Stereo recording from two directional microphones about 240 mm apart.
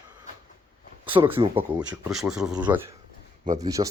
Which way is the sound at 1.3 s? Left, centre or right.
Right.